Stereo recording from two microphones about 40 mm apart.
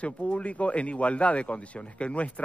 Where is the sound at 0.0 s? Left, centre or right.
Left.